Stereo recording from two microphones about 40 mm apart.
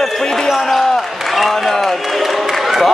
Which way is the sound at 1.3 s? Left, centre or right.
Centre.